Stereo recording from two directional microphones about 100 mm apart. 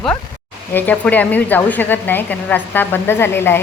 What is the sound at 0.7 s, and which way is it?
A woman's voice, 20° left (ahead or behind).